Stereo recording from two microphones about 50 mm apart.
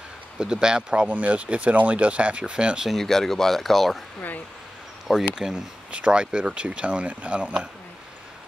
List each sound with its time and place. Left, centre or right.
0.4 s speech: centre
1.0 s speech: right
2.9 s speech: centre
5.3 s speech: centre
5.9 s speech: right